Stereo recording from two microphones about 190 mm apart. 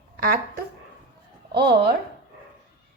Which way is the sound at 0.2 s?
50° right (ahead or behind).